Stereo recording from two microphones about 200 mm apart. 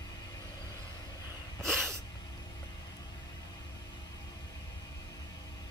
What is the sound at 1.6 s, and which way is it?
Sneeze, 5° right (ahead or behind).